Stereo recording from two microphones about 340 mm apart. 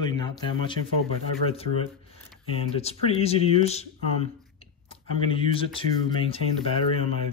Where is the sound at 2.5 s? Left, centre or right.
Centre.